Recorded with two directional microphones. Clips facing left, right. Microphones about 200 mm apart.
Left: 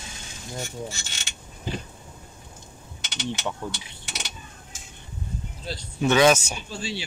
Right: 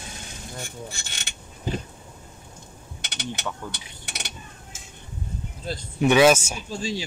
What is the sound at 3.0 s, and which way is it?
Mechanisms, 55° right (ahead or behind).